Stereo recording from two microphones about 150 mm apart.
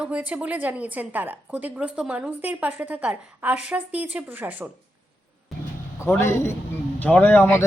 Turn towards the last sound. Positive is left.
turn(degrees=10)  # may be behind; listen again after turning